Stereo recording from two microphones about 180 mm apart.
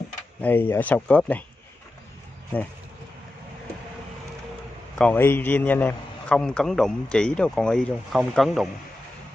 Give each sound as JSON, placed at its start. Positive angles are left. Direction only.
{"t": 0.4, "sound": "speech", "side_deg": 10}
{"t": 4.9, "sound": "a man's voice", "side_deg": 10}